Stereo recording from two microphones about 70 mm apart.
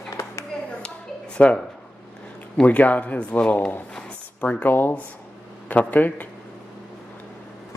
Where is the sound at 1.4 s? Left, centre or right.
Left.